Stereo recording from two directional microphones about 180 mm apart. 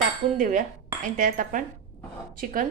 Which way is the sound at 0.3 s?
45° right (ahead or behind).